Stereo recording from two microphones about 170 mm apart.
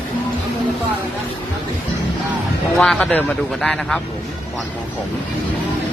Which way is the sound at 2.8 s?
Centre (ahead or behind).